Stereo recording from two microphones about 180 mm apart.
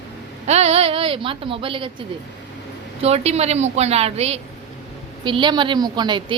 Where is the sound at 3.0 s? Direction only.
35° right (ahead or behind).